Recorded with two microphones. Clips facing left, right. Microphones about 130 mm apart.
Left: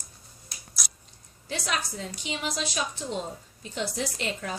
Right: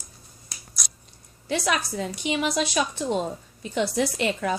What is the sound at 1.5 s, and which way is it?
A woman's voice, 70° right (ahead or behind).